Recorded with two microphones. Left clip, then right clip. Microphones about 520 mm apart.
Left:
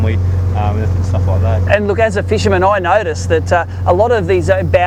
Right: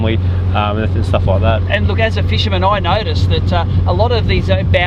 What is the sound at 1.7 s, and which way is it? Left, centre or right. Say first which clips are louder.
Speech: left 4 dB; left.